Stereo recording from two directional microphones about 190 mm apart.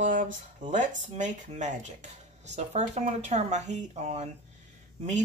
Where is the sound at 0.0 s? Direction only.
45° right (ahead or behind).